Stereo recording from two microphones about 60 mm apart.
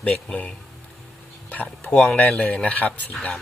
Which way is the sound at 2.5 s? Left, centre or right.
Left.